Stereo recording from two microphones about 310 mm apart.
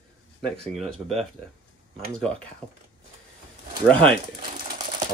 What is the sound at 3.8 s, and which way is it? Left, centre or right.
Speech, centre.